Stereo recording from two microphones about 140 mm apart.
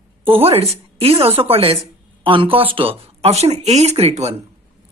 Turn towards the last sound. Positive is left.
turn(degrees=-50)  # may be behind; listen again after turning